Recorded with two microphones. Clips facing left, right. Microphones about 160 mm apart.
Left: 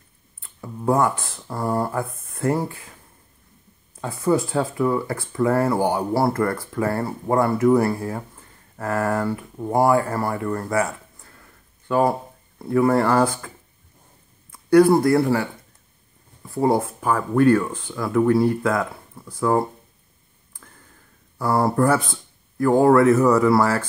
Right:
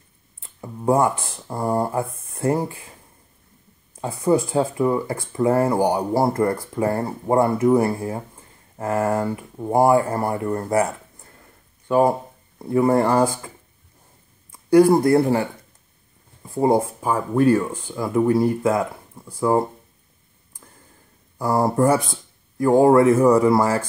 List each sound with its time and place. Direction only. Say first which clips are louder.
0.4 s speech: even; 20° right (ahead or behind)
4.0 s speech: right 1 dB; 20° right (ahead or behind)
12.6 s speech: right 1 dB; 20° right (ahead or behind)
14.7 s speech: right 1 dB; 20° right (ahead or behind)
16.4 s speech: right 1 dB; 20° right (ahead or behind)
17.8 s speech: left 1 dB; 25° right (ahead or behind)
21.4 s speech: right 1 dB; 15° right (ahead or behind)